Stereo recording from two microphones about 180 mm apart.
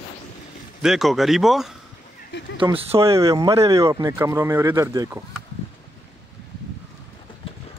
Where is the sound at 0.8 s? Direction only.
Centre (ahead or behind).